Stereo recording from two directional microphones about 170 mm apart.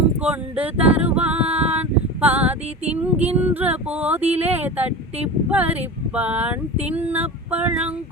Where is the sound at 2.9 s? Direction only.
10° right (ahead or behind).